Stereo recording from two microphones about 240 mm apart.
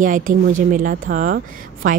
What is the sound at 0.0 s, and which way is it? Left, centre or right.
Speech, right.